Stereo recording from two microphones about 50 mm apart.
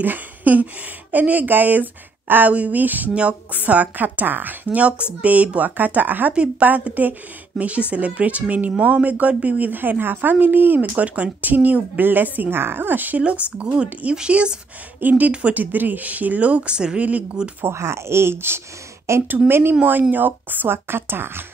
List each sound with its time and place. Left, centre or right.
0.0 s a sound: right
1.1 s speech: right
4.7 s speech: right
6.3 s speech: right
6.7 s speech: right
13.6 s speech: right
15.0 s speech: right
17.6 s speech: right
19.2 s speech: right